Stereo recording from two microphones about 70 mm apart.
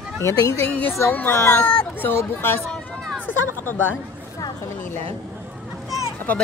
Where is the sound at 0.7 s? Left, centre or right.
Left.